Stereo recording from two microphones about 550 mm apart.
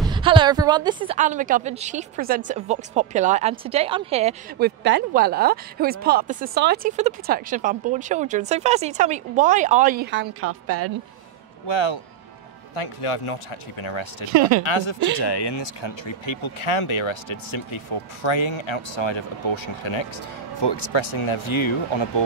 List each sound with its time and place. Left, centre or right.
0.0 s a woman's voice: centre; by 10.9 s right
11.6 s speech: left
12.7 s speech: left